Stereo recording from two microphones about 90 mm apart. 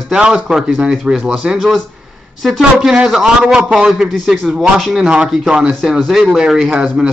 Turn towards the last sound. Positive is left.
turn(degrees=-5)  # may be behind; listen again after turning